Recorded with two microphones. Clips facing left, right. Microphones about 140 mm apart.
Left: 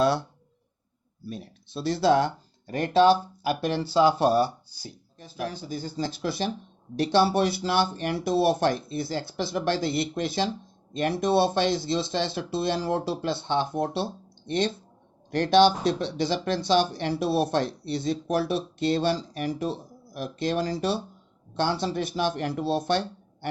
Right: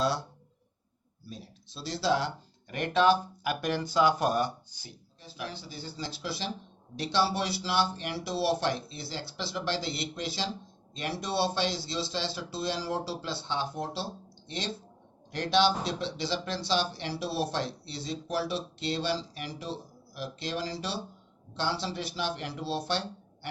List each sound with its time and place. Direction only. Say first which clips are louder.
0.0 s speech: left 6 dB; 55° left (ahead or behind)
2.6 s speech: left 5 dB; 35° left (ahead or behind)
5.2 s speech: left 7 dB; 45° left (ahead or behind)